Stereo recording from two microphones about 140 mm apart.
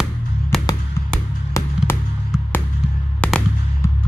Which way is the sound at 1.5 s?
15° left (ahead or behind).